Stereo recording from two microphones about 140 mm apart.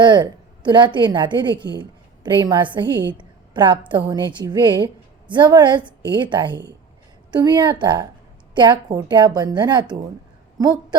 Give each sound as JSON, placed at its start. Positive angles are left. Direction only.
{"t": 0.0, "sound": "a woman's voice", "side_deg": -35}